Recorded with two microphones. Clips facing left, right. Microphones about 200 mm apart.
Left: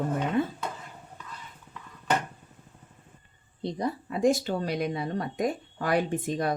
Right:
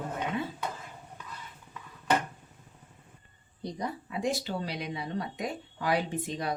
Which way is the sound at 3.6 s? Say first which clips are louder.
Left 5 dB; 25° left (ahead or behind).